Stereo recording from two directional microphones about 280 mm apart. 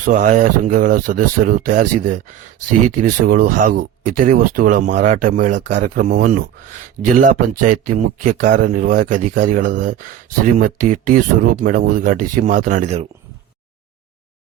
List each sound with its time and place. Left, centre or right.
0.0 s speech: right